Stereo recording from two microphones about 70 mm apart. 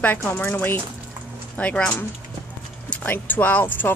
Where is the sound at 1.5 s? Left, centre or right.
Centre.